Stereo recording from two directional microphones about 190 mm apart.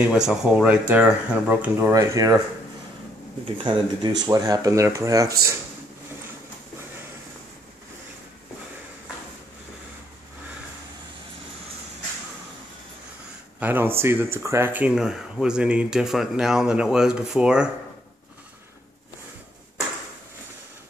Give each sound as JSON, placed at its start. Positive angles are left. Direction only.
{"t": 0.0, "sound": "speech", "side_deg": -5}
{"t": 3.5, "sound": "speech", "side_deg": -25}
{"t": 13.6, "sound": "speech", "side_deg": -10}